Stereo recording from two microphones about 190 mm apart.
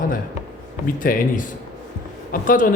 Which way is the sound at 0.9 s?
45° left (ahead or behind).